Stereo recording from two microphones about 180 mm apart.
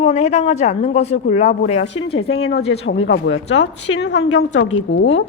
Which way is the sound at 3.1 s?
90° left.